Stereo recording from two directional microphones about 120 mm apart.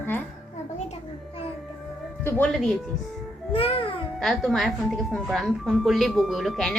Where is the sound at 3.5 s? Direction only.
50° left (ahead or behind).